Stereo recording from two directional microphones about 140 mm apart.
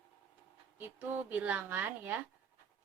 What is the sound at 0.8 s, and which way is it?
Speech, 15° right (ahead or behind).